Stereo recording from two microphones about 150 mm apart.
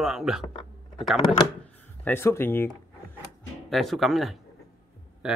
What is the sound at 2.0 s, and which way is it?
Speech, 15° left (ahead or behind).